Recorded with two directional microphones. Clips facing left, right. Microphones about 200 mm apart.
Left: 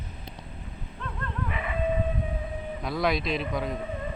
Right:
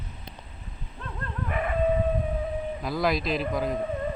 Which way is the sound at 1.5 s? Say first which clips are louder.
Right 9 dB; 50° right (ahead or behind).